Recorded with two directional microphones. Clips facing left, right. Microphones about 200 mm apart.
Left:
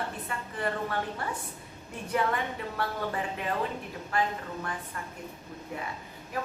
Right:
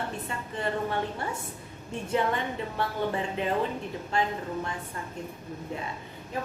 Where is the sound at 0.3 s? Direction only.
25° right (ahead or behind).